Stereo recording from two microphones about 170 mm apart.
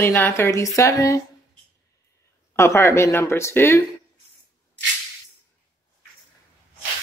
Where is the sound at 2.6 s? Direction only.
15° left (ahead or behind).